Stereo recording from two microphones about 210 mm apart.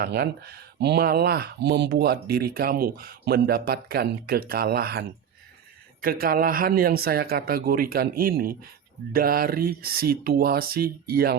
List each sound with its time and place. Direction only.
0.0 s speech: 50° right (ahead or behind)